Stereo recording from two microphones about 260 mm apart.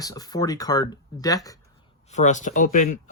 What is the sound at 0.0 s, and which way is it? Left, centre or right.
Speech, centre.